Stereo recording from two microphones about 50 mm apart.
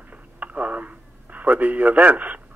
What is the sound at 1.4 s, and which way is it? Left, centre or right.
A man's voice, right.